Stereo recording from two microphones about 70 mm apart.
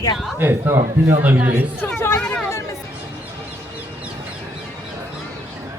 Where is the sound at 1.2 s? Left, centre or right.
Right.